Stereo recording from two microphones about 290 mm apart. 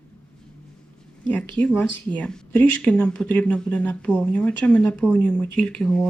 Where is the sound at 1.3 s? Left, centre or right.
Centre.